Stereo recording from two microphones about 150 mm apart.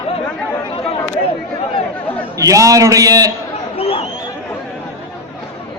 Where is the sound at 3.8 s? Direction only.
40° left (ahead or behind).